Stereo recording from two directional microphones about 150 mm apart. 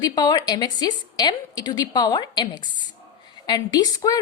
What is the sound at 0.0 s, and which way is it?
A woman's voice, 25° left (ahead or behind).